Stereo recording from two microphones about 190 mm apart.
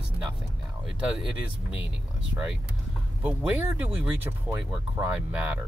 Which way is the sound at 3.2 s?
10° right (ahead or behind).